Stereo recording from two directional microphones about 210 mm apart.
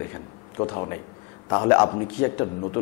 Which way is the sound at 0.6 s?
25° left (ahead or behind).